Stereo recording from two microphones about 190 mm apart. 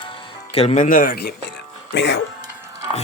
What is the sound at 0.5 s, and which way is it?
Speech, 35° left (ahead or behind).